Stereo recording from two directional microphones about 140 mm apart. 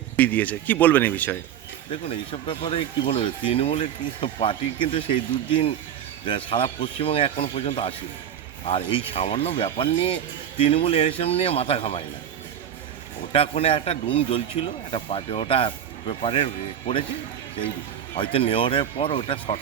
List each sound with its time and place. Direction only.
0.2 s speech: 10° left (ahead or behind)
1.9 s a man's voice: 40° left (ahead or behind)
6.2 s a man's voice: 40° left (ahead or behind)
13.3 s a man's voice: 45° left (ahead or behind)
18.2 s a man's voice: 40° left (ahead or behind)